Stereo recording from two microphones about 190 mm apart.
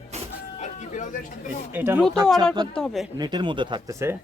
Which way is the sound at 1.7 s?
10° right (ahead or behind).